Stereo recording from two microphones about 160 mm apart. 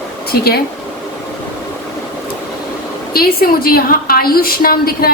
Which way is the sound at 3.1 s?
70° left (ahead or behind).